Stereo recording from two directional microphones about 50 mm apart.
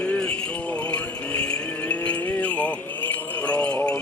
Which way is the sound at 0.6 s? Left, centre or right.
Left.